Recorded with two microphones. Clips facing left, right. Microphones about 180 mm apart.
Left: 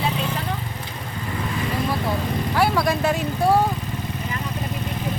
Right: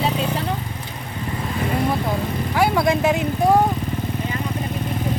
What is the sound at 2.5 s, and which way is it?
Vehicle, 20° right (ahead or behind).